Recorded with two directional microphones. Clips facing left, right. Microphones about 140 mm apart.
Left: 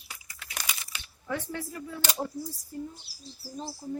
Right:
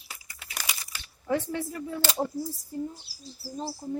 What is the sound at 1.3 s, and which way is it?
Speech, 25° right (ahead or behind).